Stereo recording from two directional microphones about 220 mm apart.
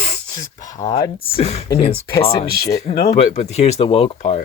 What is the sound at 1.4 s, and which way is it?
Speech, 30° left (ahead or behind).